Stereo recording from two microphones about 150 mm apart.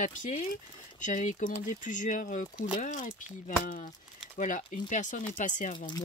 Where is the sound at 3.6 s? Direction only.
65° left (ahead or behind).